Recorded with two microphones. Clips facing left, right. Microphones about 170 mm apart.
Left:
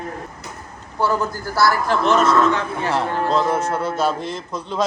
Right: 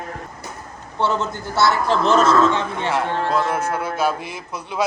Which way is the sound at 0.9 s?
25° right (ahead or behind).